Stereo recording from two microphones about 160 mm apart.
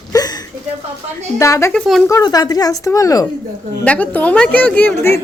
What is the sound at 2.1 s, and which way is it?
A woman's voice, 20° left (ahead or behind).